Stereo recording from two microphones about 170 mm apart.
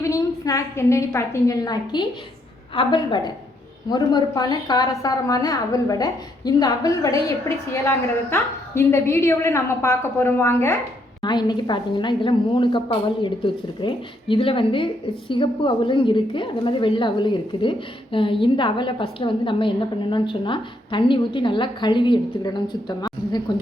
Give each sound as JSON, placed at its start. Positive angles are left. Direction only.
{"t": 0.0, "sound": "a woman's voice", "side_deg": 20}